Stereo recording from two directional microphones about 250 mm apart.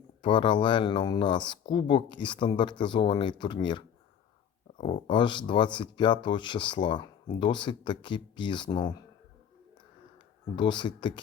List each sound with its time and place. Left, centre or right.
0.2 s speech: centre
10.5 s speech: centre